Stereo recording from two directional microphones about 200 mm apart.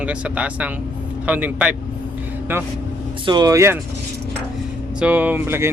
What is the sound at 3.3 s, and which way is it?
Speech, 20° right (ahead or behind).